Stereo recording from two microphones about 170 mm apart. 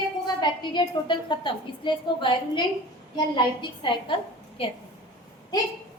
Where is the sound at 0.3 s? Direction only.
25° left (ahead or behind).